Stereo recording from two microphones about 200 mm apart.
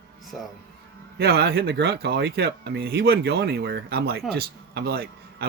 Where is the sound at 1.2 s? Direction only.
55° right (ahead or behind).